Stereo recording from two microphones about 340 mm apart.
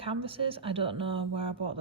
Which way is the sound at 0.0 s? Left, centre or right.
Centre.